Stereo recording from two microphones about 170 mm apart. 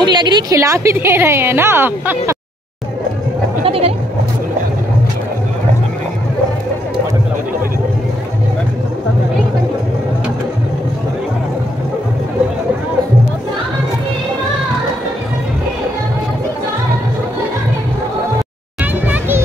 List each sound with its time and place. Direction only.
0.0 s a woman's voice: 25° right (ahead or behind)
3.6 s bleat: 35° right (ahead or behind)
19.0 s music: 10° right (ahead or behind)